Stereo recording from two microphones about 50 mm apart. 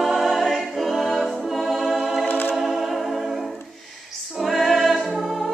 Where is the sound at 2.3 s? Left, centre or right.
Left.